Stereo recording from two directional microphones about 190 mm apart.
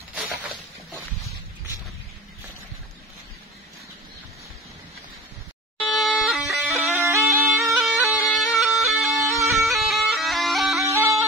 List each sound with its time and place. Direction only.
5.8 s music: centre (ahead or behind)
7.0 s bagpipes: 15° right (ahead or behind)
7.7 s bagpipes: 5° right (ahead or behind)
10.8 s bagpipes: 15° right (ahead or behind)